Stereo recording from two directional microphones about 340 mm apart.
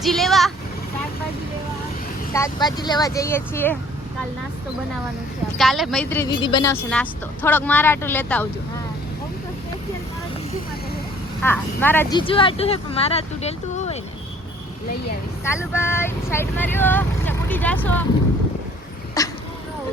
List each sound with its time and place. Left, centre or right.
0.0 s speech: centre
2.3 s speech: centre
5.5 s speech: centre
11.4 s speech: centre
15.4 s speech: centre
19.2 s speech: centre